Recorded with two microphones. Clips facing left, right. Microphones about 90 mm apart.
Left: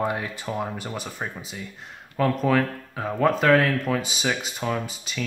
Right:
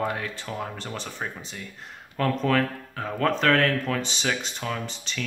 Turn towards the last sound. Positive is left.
turn(degrees=5)  # may be behind; listen again after turning